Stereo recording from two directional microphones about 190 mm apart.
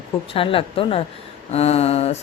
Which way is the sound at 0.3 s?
30° left (ahead or behind).